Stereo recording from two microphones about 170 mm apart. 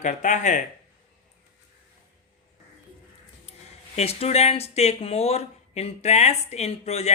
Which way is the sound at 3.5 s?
40° left (ahead or behind).